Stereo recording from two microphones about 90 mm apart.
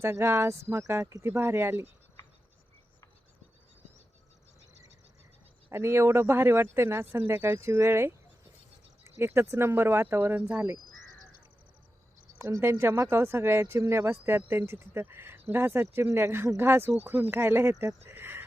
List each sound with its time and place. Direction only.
0.0 s speech: 30° right (ahead or behind)
5.7 s speech: 30° right (ahead or behind)
12.4 s speech: 30° right (ahead or behind)